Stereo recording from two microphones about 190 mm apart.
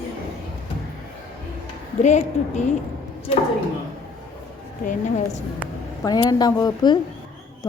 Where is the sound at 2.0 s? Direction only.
40° left (ahead or behind).